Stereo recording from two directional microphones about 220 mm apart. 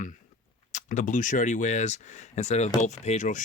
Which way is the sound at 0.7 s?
35° left (ahead or behind).